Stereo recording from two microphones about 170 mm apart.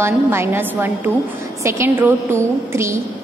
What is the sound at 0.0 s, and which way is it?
A woman's voice, 15° right (ahead or behind).